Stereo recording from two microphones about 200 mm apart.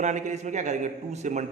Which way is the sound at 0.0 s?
35° right (ahead or behind).